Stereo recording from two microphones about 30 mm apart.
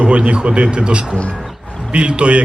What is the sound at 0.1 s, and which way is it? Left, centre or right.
A man's voice, right.